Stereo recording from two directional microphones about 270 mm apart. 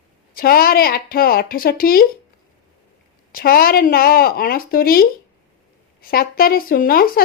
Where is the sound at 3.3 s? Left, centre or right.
Left.